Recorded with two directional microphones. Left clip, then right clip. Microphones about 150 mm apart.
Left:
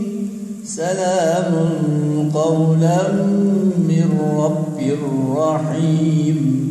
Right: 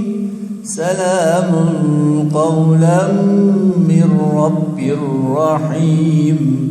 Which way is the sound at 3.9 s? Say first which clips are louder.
Right 4 dB; 30° right (ahead or behind).